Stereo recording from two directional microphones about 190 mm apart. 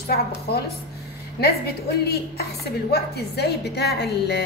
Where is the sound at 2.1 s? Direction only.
55° left (ahead or behind).